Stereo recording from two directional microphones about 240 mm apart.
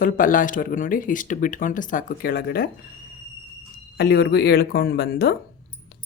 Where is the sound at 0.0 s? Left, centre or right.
Left.